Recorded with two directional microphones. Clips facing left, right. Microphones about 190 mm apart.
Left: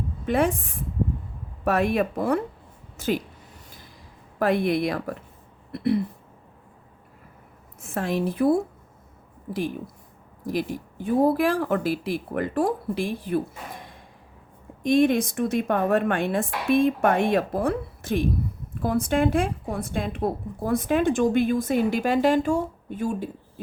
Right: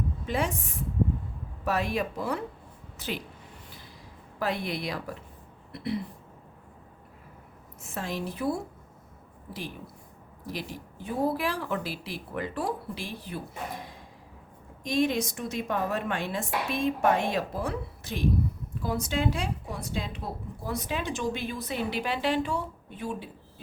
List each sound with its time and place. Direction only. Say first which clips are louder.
0.3 s a woman's voice: left 8 dB; 55° left (ahead or behind)
1.6 s a woman's voice: left 6 dB; 55° left (ahead or behind)
4.4 s a woman's voice: left 9 dB; 55° left (ahead or behind)
7.8 s a woman's voice: left 8 dB; 55° left (ahead or behind)
14.8 s a woman's voice: left 7 dB; 55° left (ahead or behind)